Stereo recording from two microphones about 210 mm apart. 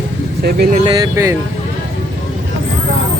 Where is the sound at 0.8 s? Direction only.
20° right (ahead or behind).